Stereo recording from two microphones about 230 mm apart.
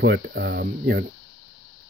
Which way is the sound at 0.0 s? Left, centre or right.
Right.